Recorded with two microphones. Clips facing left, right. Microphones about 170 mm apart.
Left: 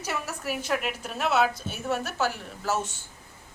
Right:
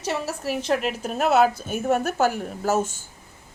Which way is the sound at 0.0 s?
30° right (ahead or behind).